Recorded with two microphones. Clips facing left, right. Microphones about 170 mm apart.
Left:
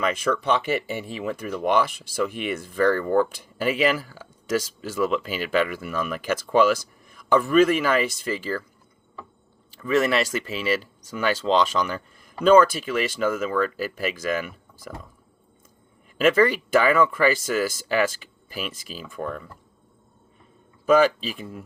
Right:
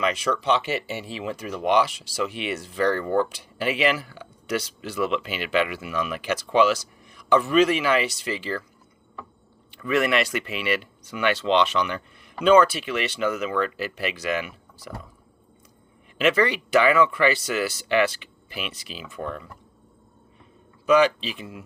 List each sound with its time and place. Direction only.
0.0 s speech: 50° left (ahead or behind)
9.8 s speech: 40° left (ahead or behind)
16.1 s speech: 45° left (ahead or behind)
20.8 s speech: 45° left (ahead or behind)